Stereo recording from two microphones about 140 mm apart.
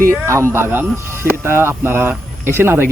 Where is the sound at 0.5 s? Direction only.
15° right (ahead or behind).